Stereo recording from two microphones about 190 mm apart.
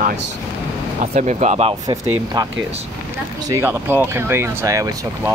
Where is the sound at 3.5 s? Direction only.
15° right (ahead or behind).